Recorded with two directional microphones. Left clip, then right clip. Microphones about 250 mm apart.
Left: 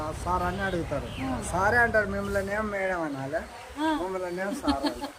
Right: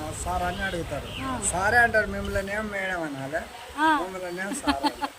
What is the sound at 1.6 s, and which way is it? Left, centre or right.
Speech, centre.